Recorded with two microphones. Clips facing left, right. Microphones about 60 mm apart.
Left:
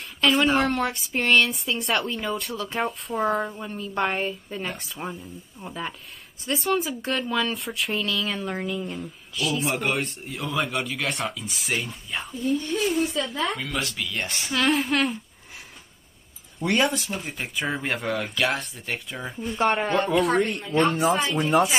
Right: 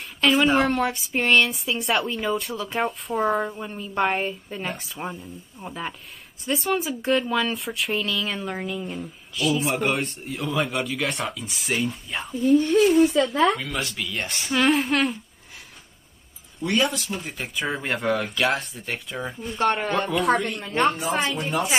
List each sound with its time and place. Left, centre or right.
0.0 s speech: centre
12.4 s speech: right
13.6 s speech: centre
16.5 s speech: left
17.2 s speech: centre
20.2 s speech: right
21.3 s speech: left